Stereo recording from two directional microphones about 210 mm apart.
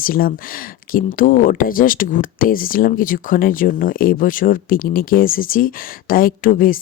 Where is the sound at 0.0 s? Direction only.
45° left (ahead or behind).